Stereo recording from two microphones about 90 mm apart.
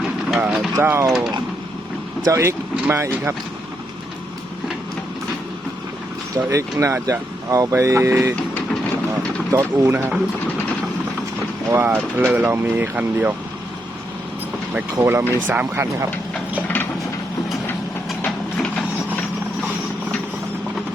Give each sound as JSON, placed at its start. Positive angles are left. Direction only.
{"t": 0.0, "sound": "vehicle", "side_deg": -5}
{"t": 0.8, "sound": "speech", "side_deg": -30}
{"t": 2.2, "sound": "speech", "side_deg": -35}
{"t": 6.3, "sound": "speech", "side_deg": -35}
{"t": 9.5, "sound": "speech", "side_deg": -30}
{"t": 11.7, "sound": "speech", "side_deg": -30}
{"t": 15.0, "sound": "speech", "side_deg": -25}